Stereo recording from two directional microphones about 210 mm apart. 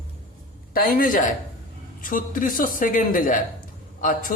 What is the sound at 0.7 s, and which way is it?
A man's voice, 45° left (ahead or behind).